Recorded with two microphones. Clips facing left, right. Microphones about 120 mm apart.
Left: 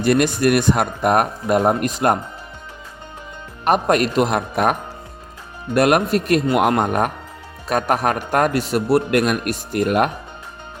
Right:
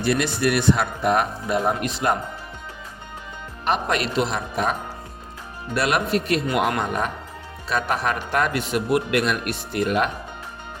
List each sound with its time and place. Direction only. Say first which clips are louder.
0.0 s a man's voice: left 5 dB; 50° left (ahead or behind)
3.6 s a man's voice: left 6 dB; 50° left (ahead or behind)
5.7 s a man's voice: left 6 dB; 50° left (ahead or behind)